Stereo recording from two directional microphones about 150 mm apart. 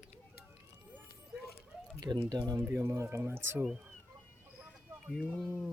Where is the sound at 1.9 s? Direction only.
25° right (ahead or behind).